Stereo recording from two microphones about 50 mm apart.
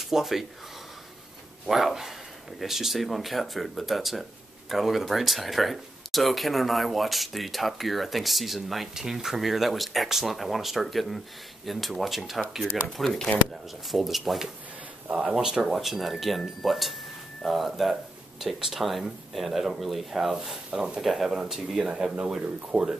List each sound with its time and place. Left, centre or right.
0.0 s speech: centre
1.7 s speech: centre
21.0 s speech: centre